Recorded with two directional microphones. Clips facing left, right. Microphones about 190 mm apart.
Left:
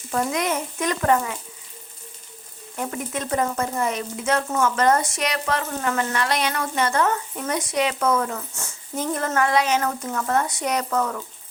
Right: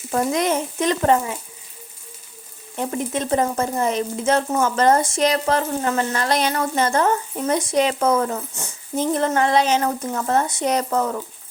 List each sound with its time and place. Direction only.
0.1 s speech: 30° right (ahead or behind)
2.7 s speech: 25° right (ahead or behind)
8.5 s speech: 15° right (ahead or behind)